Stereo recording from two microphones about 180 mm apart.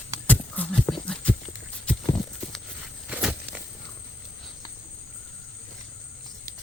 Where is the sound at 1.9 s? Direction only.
5° left (ahead or behind).